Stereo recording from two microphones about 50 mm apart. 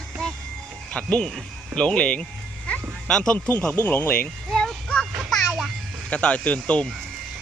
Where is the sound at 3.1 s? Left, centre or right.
Centre.